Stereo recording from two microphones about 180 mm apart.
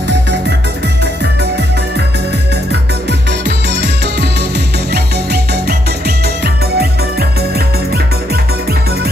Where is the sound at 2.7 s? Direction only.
70° right (ahead or behind).